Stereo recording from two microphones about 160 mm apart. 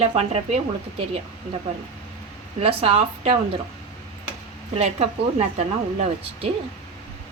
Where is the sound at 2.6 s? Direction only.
40° right (ahead or behind).